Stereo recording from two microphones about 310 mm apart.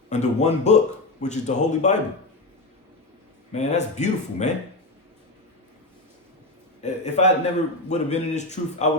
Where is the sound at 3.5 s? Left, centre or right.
Left.